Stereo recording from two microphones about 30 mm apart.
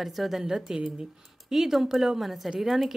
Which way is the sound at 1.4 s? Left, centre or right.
Centre.